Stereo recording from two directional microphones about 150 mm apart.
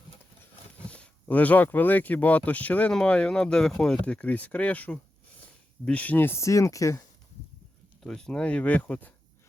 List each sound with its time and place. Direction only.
0.8 s speech: 10° left (ahead or behind)
8.0 s speech: 5° left (ahead or behind)